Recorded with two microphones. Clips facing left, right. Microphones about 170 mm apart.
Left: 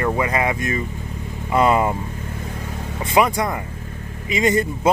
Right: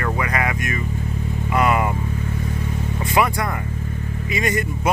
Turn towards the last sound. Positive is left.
turn(degrees=25)  # may be behind; listen again after turning